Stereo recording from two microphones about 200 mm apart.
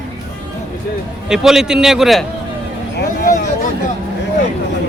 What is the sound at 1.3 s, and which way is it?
Speech, 5° right (ahead or behind).